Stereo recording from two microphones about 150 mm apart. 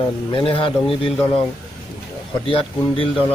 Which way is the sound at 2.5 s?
40° left (ahead or behind).